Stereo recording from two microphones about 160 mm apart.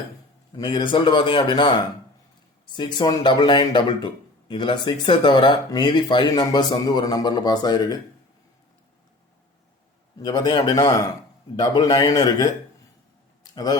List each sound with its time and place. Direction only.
0.5 s a man's voice: 30° left (ahead or behind)
10.2 s speech: 25° left (ahead or behind)
13.4 s a sound: 25° left (ahead or behind)